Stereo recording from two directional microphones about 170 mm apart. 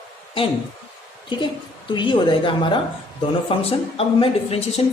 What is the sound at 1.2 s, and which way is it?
A woman's voice, 30° left (ahead or behind).